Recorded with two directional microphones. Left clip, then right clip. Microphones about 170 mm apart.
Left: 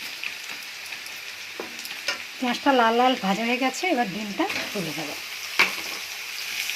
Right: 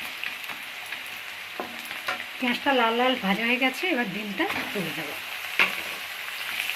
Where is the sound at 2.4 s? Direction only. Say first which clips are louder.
Left 3 dB; 30° left (ahead or behind).